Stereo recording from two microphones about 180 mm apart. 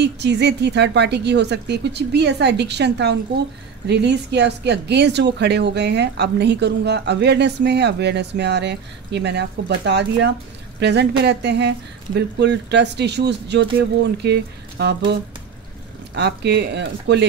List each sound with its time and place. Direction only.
0.0 s speech: 70° right (ahead or behind)
16.2 s speech: 70° right (ahead or behind)